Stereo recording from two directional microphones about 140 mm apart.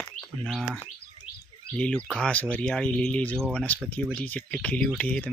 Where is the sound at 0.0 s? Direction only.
5° left (ahead or behind).